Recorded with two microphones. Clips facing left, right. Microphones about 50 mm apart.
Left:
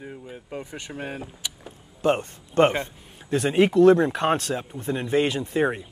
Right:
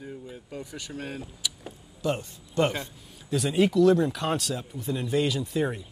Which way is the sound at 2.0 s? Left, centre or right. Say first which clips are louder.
Left 7 dB; left.